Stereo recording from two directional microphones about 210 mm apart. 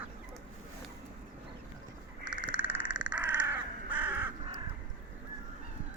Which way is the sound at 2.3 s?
10° right (ahead or behind).